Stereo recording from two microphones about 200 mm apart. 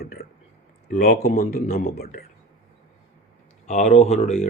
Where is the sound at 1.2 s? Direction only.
35° left (ahead or behind).